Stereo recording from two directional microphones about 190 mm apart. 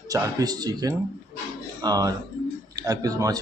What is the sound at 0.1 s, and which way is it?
A man's voice, 20° right (ahead or behind).